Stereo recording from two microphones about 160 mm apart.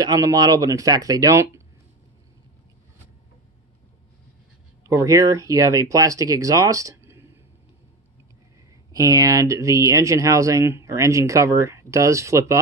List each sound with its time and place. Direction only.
0.0 s speech: 20° right (ahead or behind)
4.8 s speech: 20° right (ahead or behind)
8.9 s speech: 20° right (ahead or behind)